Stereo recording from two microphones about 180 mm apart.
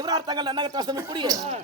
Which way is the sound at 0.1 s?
25° right (ahead or behind).